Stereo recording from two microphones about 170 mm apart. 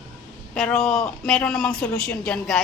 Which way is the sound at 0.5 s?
5° left (ahead or behind).